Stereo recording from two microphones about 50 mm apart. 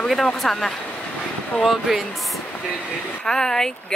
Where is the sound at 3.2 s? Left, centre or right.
Centre.